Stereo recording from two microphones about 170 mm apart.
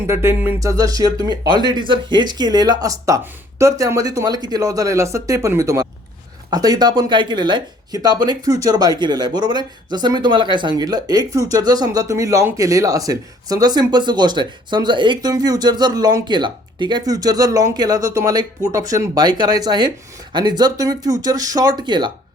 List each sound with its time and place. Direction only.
0.1 s speech: 15° right (ahead or behind)